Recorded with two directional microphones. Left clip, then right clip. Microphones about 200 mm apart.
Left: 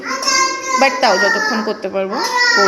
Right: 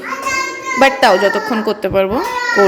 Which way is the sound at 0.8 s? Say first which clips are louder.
Right 3 dB; 35° right (ahead or behind).